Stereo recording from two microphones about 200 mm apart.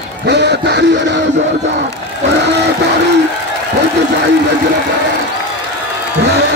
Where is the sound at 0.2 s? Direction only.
60° right (ahead or behind).